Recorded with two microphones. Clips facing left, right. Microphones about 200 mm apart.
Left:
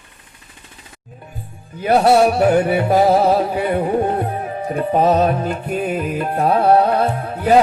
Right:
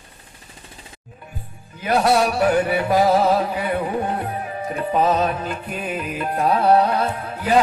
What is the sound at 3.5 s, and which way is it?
Carnatic music, 40° left (ahead or behind).